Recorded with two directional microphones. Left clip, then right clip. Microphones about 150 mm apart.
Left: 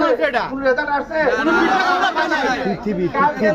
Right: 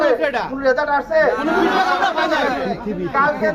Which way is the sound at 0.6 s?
35° right (ahead or behind).